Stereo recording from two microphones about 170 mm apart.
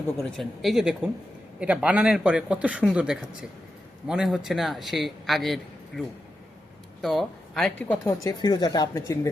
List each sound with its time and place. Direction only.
0.2 s speech: centre (ahead or behind)
7.0 s speech: centre (ahead or behind)
8.2 s a woman's voice: 25° left (ahead or behind)